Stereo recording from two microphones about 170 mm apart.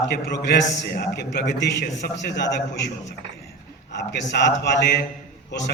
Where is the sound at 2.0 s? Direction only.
75° left (ahead or behind).